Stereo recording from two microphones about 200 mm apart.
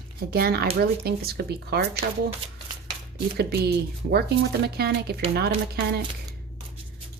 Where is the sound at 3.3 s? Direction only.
50° right (ahead or behind).